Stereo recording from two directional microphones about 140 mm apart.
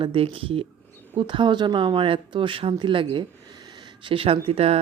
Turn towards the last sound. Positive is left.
turn(degrees=-45)  # may be behind; listen again after turning